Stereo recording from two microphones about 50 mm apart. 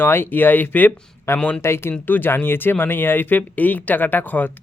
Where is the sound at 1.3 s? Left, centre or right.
Left.